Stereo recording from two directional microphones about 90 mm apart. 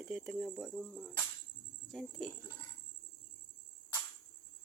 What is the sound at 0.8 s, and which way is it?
Speech, 10° left (ahead or behind).